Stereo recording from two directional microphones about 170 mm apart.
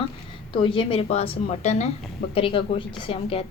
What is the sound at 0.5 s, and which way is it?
A woman's voice, 30° left (ahead or behind).